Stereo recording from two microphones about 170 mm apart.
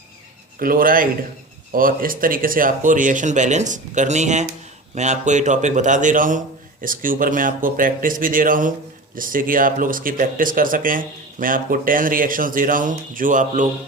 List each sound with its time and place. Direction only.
0.6 s speech: 55° right (ahead or behind)